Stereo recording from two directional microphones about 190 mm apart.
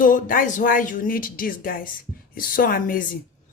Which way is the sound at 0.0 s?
45° left (ahead or behind).